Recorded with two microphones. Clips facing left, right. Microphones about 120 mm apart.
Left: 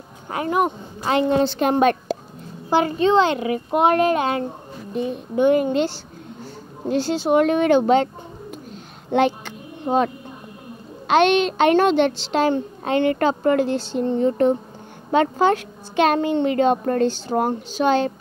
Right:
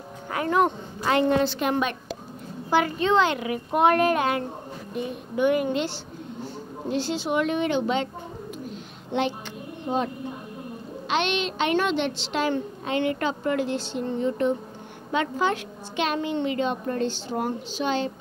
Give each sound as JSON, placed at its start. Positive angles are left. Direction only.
{"t": 0.3, "sound": "speech", "side_deg": 20}
{"t": 1.0, "sound": "a child's voice", "side_deg": 25}
{"t": 1.6, "sound": "a woman's voice", "side_deg": 40}
{"t": 2.7, "sound": "a child's voice", "side_deg": 25}
{"t": 9.1, "sound": "a sound", "side_deg": 50}
{"t": 11.1, "sound": "a woman's voice", "side_deg": 45}